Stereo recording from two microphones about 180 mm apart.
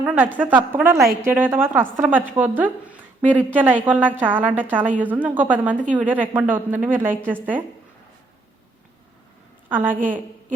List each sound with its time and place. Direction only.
0.0 s a woman's voice: 10° right (ahead or behind)
9.6 s a woman's voice: 10° right (ahead or behind)